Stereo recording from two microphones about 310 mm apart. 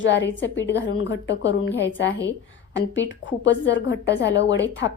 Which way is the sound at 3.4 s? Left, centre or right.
Left.